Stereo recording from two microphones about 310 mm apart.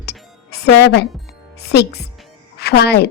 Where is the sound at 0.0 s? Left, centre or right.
Left.